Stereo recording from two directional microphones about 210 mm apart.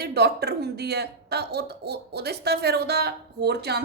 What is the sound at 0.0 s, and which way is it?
A woman's voice, 50° right (ahead or behind).